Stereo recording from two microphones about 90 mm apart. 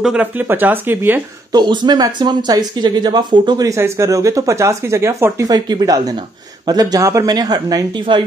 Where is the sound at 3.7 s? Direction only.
35° right (ahead or behind).